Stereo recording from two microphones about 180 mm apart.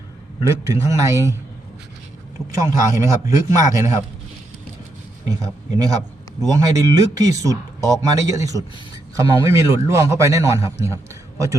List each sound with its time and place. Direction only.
0.4 s a man's voice: 15° right (ahead or behind)
2.5 s a man's voice: 20° right (ahead or behind)
5.4 s a man's voice: 20° right (ahead or behind)